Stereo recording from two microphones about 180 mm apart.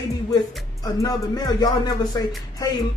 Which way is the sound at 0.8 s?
20° left (ahead or behind).